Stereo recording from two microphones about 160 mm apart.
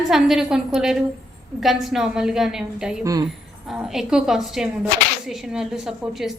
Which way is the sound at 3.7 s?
Centre (ahead or behind).